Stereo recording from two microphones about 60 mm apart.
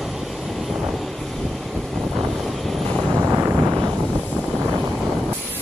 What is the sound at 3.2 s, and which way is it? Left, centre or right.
Vehicle, right.